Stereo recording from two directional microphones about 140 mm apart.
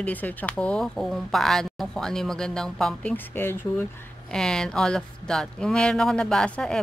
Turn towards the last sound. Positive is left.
turn(degrees=5)  # may be behind; listen again after turning